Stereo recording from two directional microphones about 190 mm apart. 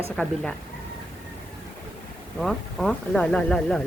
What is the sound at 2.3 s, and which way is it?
Speech, centre (ahead or behind).